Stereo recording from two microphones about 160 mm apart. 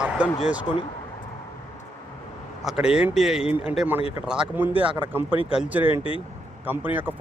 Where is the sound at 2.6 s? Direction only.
5° right (ahead or behind).